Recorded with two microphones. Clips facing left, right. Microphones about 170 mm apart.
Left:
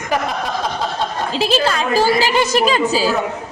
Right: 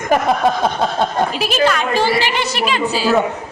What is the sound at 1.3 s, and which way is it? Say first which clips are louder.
A woman's voice: right 1 dB; 30° left (ahead or behind).